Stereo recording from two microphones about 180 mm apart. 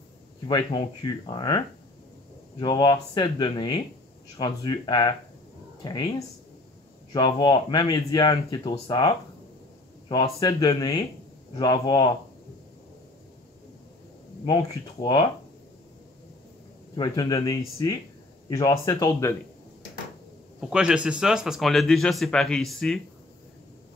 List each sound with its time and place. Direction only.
0.5 s speech: 25° left (ahead or behind)
2.6 s speech: 25° left (ahead or behind)
14.4 s speech: 20° left (ahead or behind)
16.9 s speech: 25° left (ahead or behind)
20.7 s speech: 5° right (ahead or behind)